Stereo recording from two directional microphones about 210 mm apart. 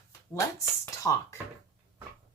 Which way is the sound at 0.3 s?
15° left (ahead or behind).